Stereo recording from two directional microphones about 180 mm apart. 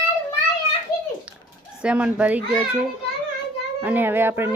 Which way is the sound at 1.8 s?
5° right (ahead or behind).